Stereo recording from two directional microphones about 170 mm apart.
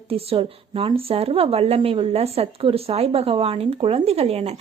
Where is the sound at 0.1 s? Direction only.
35° right (ahead or behind).